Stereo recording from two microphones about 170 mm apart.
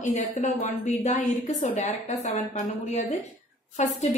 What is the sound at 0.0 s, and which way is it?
A woman's voice, 45° left (ahead or behind).